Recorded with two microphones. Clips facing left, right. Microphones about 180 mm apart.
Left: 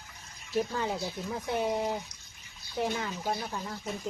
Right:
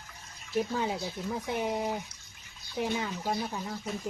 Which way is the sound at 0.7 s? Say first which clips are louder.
Right 1 dB; 15° right (ahead or behind).